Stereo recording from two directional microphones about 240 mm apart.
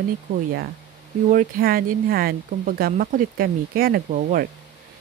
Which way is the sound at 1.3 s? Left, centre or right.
Right.